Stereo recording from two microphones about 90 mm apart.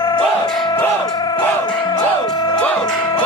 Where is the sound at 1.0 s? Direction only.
50° left (ahead or behind).